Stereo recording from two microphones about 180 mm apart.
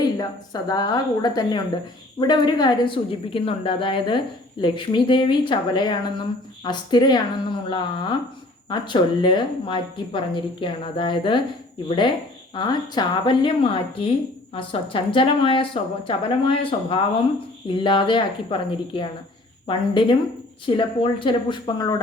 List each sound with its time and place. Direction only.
0.0 s a woman's voice: 20° left (ahead or behind)